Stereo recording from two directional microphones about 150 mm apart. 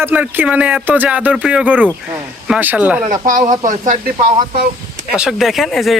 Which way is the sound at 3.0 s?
60° right (ahead or behind).